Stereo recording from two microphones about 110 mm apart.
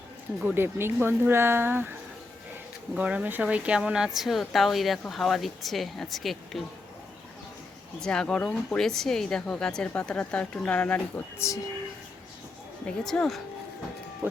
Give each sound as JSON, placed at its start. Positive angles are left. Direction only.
{"t": 0.4, "sound": "speech", "side_deg": -20}
{"t": 2.9, "sound": "speech", "side_deg": -10}
{"t": 8.0, "sound": "speech", "side_deg": 5}
{"t": 11.3, "sound": "speech", "side_deg": 25}
{"t": 12.8, "sound": "speech", "side_deg": 5}